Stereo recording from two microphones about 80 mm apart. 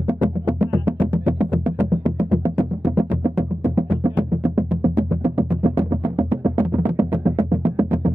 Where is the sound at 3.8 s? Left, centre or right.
Centre.